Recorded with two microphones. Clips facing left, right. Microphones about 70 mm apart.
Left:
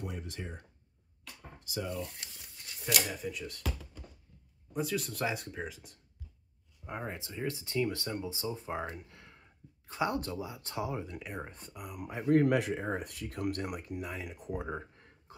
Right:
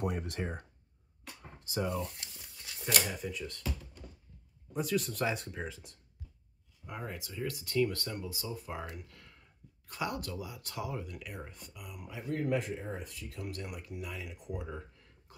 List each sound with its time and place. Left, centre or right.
0.0 s speech: right
1.6 s speech: right
3.1 s speech: centre
4.7 s speech: centre
6.9 s speech: left
12.4 s speech: left